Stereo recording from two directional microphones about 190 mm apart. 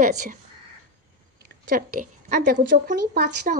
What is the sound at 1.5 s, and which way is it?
A woman's voice, 45° right (ahead or behind).